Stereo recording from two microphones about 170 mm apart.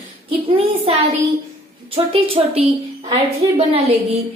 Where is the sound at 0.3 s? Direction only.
35° right (ahead or behind).